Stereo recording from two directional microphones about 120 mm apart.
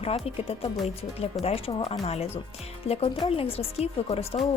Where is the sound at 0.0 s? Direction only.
55° left (ahead or behind).